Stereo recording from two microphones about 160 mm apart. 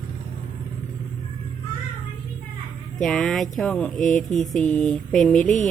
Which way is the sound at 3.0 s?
5° left (ahead or behind).